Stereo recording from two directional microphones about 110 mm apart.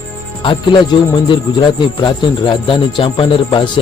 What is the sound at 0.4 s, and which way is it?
Speech, 45° left (ahead or behind).